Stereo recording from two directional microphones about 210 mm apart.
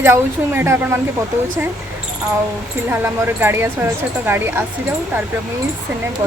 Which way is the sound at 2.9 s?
10° right (ahead or behind).